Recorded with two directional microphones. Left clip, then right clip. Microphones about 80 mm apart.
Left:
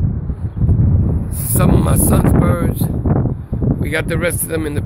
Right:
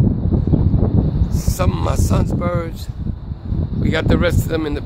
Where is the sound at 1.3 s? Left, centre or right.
Centre.